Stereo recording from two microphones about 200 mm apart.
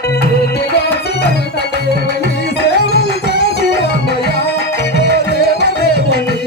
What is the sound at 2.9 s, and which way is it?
Music, 55° left (ahead or behind).